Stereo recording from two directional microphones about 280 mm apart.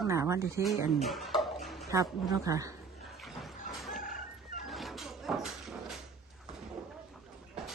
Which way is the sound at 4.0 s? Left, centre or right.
Left.